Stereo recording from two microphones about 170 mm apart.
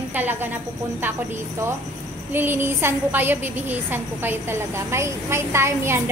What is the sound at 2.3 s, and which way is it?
A woman's voice, 10° right (ahead or behind).